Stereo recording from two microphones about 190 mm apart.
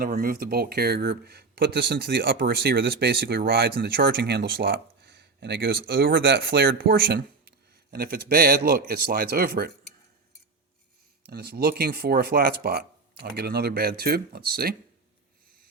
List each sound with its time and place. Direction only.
0.0 s speech: 50° right (ahead or behind)
11.3 s speech: 55° right (ahead or behind)